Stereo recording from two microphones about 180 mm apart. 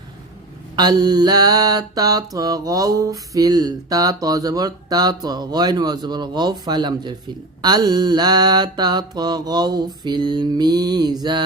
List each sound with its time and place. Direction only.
0.8 s mantra: 25° right (ahead or behind)